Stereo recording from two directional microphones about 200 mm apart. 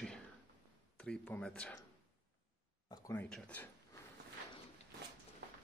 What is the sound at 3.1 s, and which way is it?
Speech, 5° left (ahead or behind).